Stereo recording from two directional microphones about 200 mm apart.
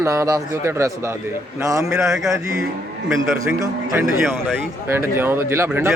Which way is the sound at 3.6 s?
15° right (ahead or behind).